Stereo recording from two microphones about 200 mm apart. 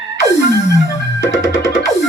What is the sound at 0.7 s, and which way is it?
Music, 65° left (ahead or behind).